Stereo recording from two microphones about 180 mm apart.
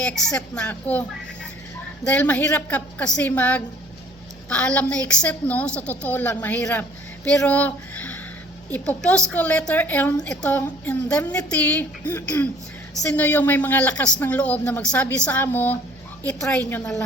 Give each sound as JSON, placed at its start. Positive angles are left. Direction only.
{"t": 0.0, "sound": "a woman's voice", "side_deg": 5}
{"t": 2.0, "sound": "a woman's voice", "side_deg": 10}